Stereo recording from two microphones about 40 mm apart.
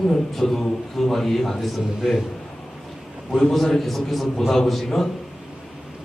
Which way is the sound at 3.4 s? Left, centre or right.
Centre.